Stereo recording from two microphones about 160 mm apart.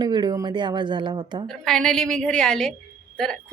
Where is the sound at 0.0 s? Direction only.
25° right (ahead or behind).